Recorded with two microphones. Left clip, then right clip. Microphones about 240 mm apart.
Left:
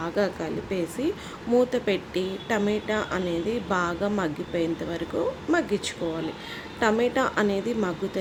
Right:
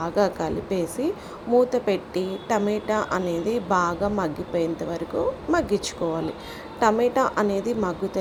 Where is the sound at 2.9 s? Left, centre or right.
Centre.